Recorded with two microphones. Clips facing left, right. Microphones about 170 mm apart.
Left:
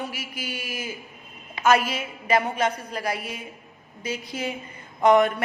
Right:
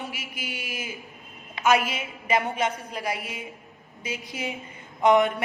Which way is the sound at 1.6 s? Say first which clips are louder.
Left 2 dB; 40° left (ahead or behind).